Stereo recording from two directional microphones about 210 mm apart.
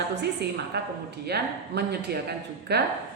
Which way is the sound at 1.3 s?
50° right (ahead or behind).